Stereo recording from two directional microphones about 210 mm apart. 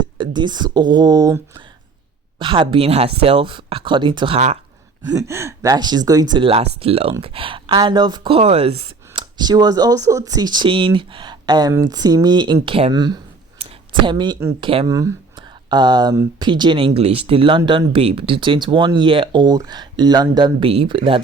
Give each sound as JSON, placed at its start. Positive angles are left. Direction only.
{"t": 0.0, "sound": "speech", "side_deg": -20}
{"t": 5.2, "sound": "speech", "side_deg": -15}
{"t": 13.6, "sound": "a sound", "side_deg": -20}
{"t": 14.6, "sound": "speech", "side_deg": -25}